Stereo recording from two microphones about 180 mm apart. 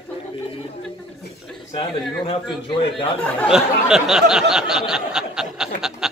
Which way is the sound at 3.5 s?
5° right (ahead or behind).